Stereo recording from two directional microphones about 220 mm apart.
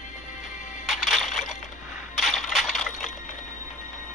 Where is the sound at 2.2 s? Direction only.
Centre (ahead or behind).